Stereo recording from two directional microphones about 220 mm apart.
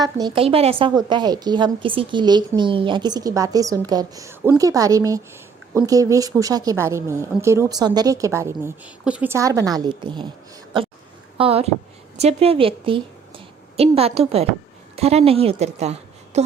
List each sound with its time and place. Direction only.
0.0 s a woman's voice: 20° right (ahead or behind)
11.3 s a woman's voice: 25° right (ahead or behind)